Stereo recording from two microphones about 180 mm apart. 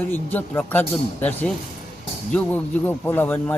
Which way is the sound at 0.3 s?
10° left (ahead or behind).